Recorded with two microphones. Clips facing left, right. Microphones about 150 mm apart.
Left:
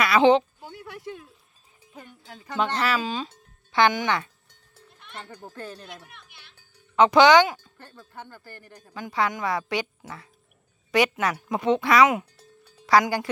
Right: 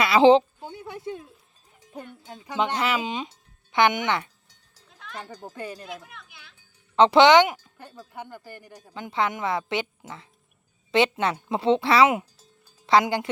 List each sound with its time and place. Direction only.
0.0 s a sound: 25° right (ahead or behind)
2.2 s a woman's voice: 20° right (ahead or behind)
4.9 s cowbell: 90° right
5.2 s speech: 15° right (ahead or behind)
6.9 s speech: 30° right (ahead or behind); by 9.0 s 10° right (ahead or behind)
9.0 s a woman's voice: 20° right (ahead or behind)
12.4 s music: 65° left (ahead or behind)
12.8 s speech: 25° right (ahead or behind)